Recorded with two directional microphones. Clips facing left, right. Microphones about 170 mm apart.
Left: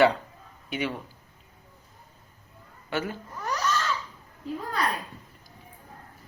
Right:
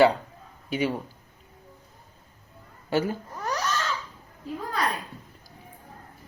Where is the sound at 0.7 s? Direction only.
35° right (ahead or behind).